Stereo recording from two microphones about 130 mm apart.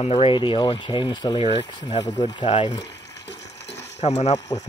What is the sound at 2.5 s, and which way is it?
Speech, 60° left (ahead or behind).